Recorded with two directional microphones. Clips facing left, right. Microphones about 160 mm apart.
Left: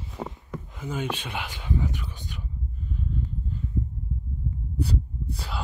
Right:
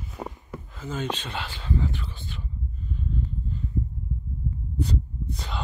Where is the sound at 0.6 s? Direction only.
15° left (ahead or behind).